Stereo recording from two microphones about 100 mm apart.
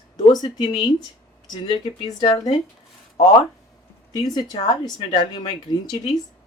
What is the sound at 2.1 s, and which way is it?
Speech, 40° left (ahead or behind).